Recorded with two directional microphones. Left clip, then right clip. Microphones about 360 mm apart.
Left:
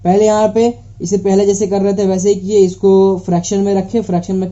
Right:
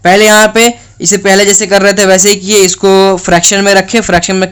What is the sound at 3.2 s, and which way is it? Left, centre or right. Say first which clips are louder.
Speech: right 9 dB; right.